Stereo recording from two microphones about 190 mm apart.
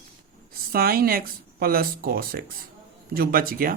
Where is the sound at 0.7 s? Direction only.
50° right (ahead or behind).